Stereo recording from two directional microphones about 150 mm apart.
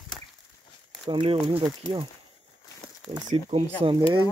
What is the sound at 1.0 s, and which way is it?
Speech, 40° right (ahead or behind).